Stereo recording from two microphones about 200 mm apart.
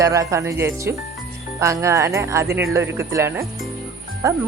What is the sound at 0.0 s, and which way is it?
Speech, 15° right (ahead or behind).